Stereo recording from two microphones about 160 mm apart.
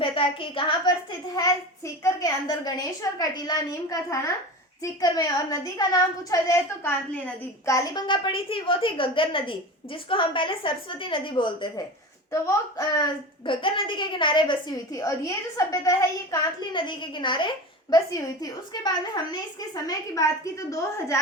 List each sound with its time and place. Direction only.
0.0 s speech: 35° left (ahead or behind)
2.0 s a woman's voice: 20° left (ahead or behind)